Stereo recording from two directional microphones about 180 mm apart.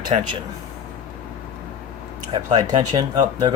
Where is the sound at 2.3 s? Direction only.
20° right (ahead or behind).